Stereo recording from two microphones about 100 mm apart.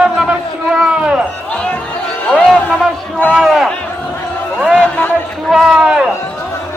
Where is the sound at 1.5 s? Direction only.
10° left (ahead or behind).